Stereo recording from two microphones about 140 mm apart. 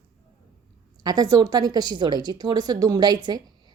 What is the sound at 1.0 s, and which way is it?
A woman's voice, 25° right (ahead or behind).